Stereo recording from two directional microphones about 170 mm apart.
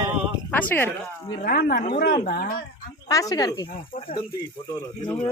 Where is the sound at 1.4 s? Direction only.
60° left (ahead or behind).